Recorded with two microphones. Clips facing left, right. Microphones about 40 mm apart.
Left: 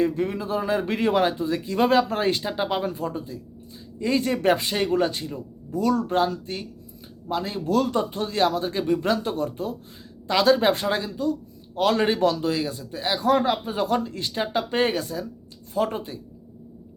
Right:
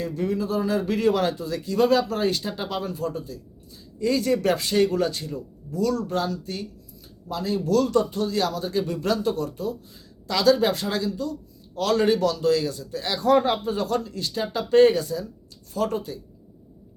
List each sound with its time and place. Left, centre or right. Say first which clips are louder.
0.0 s speech: left 2 dB; left